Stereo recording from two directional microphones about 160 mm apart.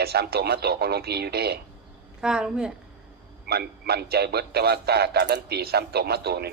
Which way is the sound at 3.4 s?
80° right.